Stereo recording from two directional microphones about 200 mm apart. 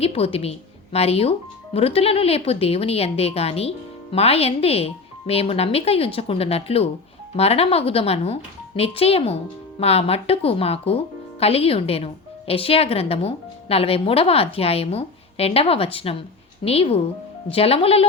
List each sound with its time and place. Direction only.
0.0 s speech: 30° left (ahead or behind)